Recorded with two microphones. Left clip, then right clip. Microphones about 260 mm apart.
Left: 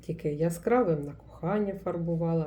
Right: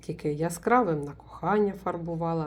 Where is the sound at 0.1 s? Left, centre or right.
Centre.